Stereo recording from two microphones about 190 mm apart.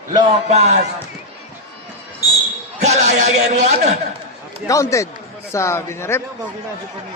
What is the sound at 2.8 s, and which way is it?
A man's voice, 35° right (ahead or behind).